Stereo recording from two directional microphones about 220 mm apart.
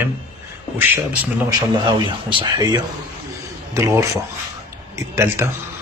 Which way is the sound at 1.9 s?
20° right (ahead or behind).